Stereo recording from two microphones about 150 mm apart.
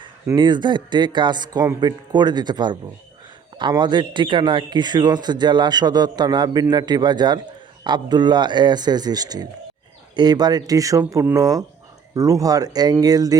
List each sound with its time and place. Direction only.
0.3 s a man's voice: 30° right (ahead or behind)